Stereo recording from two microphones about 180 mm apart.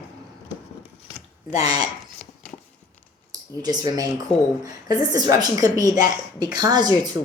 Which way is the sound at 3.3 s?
20° right (ahead or behind).